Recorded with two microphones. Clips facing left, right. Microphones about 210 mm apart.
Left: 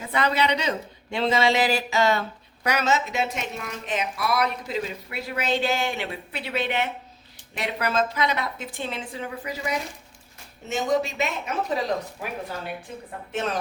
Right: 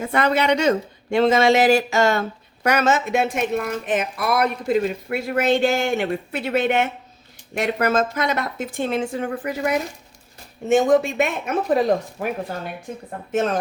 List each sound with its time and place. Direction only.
0.0 s a woman's voice: 50° right (ahead or behind)